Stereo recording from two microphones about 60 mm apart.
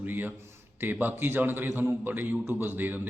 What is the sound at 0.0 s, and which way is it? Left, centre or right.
A man's voice, right.